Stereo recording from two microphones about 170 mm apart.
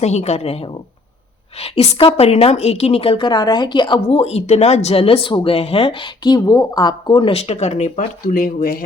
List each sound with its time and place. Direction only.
0.0 s a woman's voice: 40° left (ahead or behind); by 8.8 s 55° left (ahead or behind)